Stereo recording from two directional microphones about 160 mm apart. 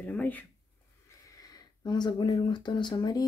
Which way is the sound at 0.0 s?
10° left (ahead or behind).